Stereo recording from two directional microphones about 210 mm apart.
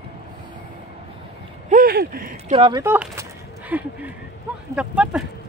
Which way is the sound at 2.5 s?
20° right (ahead or behind).